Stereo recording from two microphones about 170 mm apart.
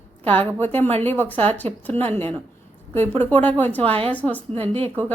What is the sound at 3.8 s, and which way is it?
A woman's voice, 35° right (ahead or behind).